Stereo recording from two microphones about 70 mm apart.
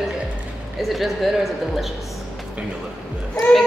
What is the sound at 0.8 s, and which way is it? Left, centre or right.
A woman's voice, centre.